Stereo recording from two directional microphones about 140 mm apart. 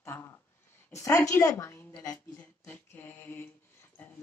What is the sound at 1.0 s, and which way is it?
Speech, 20° left (ahead or behind).